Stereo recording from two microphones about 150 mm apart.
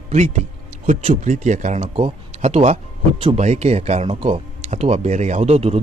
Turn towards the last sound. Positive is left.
turn(degrees=-45)  # may be behind; listen again after turning